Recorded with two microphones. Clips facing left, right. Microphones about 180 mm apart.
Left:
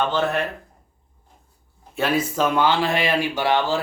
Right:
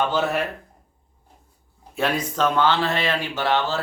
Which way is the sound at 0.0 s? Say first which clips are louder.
Even; 5° right (ahead or behind).